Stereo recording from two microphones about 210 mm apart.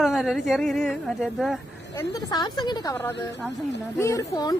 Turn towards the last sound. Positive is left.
turn(degrees=15)  # may be behind; listen again after turning